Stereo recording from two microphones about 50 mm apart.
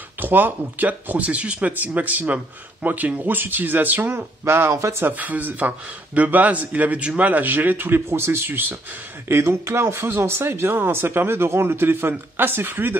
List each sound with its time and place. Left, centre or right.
0.2 s speech: right
4.5 s speech: right
5.0 s speech: right
9.3 s speech: right